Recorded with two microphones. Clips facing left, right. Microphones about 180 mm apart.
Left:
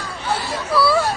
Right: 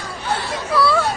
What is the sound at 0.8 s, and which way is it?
Chatter, centre (ahead or behind).